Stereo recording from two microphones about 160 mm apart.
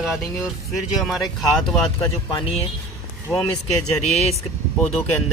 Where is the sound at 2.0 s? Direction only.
20° left (ahead or behind).